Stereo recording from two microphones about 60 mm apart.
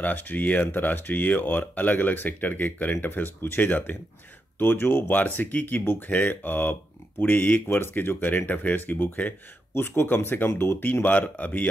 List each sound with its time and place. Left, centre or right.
0.0 s speech: left